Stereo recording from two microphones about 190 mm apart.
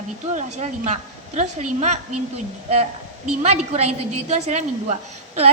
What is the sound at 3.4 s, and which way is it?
A woman's voice, 35° right (ahead or behind).